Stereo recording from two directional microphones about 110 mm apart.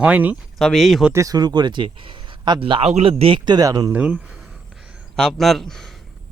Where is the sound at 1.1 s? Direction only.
35° right (ahead or behind); by 3.1 s 70° right (ahead or behind).